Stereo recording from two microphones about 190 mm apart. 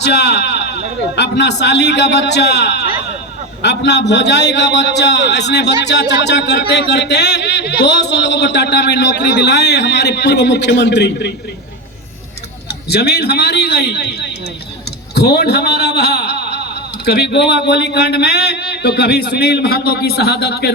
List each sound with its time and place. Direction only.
0.0 s a man's voice: 65° left (ahead or behind)
12.9 s a man's voice: 60° left (ahead or behind)